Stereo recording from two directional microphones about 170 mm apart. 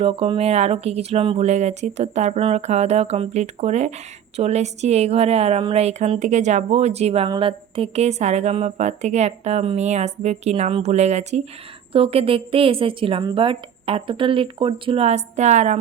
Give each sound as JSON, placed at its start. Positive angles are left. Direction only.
{"t": 0.0, "sound": "speech", "side_deg": -35}